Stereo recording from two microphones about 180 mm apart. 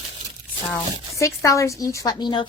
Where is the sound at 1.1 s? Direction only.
15° left (ahead or behind).